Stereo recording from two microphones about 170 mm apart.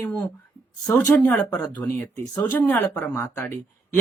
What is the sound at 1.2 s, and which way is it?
Speech, 10° left (ahead or behind).